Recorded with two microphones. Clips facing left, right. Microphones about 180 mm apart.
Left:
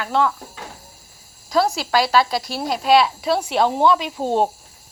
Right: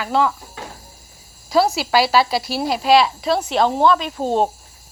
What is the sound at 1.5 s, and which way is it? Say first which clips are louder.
Speech: right 2 dB; 5° right (ahead or behind).